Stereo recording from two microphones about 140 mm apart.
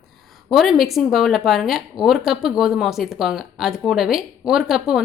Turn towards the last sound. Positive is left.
turn(degrees=-5)  # may be behind; listen again after turning